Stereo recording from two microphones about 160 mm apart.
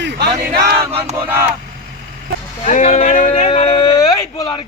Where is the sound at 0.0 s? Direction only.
90° right.